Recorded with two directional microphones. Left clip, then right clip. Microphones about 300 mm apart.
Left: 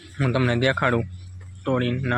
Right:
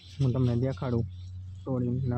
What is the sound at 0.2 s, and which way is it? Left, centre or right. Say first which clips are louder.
Speech: left 9 dB; centre.